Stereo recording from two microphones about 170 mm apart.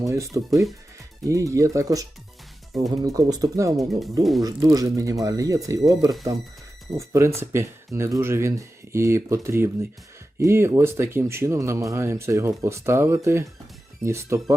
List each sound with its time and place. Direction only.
0.0 s speech: 20° right (ahead or behind)
4.2 s speech: centre (ahead or behind)
4.4 s speech: 20° right (ahead or behind)